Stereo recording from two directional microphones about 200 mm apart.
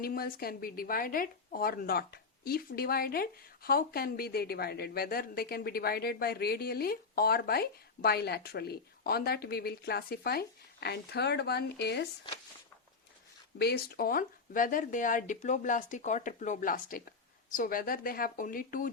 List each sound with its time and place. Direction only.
0.0 s speech: 45° left (ahead or behind)
13.6 s speech: 55° left (ahead or behind)